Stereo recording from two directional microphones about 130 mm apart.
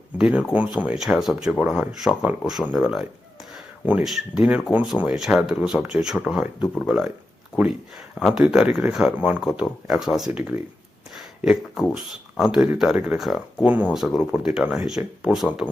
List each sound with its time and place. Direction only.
0.2 s speech: 5° right (ahead or behind)
11.4 s speech: centre (ahead or behind)